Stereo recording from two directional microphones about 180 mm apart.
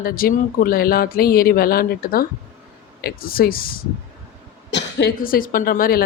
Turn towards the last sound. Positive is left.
turn(degrees=55)  # may be behind; listen again after turning